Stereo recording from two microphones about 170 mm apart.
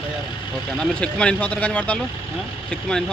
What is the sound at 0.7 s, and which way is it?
Speech, 5° left (ahead or behind).